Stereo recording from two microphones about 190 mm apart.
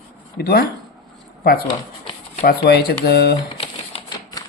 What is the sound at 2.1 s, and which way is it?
Shuffling cards, 25° left (ahead or behind).